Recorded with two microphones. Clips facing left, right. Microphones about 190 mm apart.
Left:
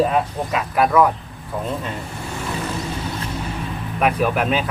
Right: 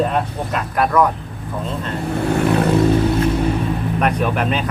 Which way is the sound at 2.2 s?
65° right (ahead or behind).